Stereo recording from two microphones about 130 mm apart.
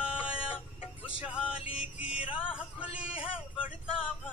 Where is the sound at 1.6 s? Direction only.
45° left (ahead or behind).